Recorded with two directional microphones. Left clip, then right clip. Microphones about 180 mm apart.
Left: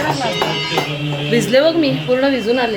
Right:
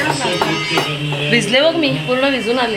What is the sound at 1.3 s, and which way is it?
A woman's voice, 15° left (ahead or behind).